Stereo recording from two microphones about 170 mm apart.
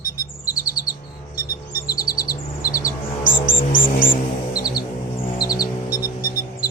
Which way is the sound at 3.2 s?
55° left (ahead or behind).